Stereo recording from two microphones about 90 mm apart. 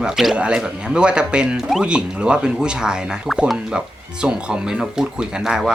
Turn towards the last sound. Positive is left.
turn(degrees=-5)  # may be behind; listen again after turning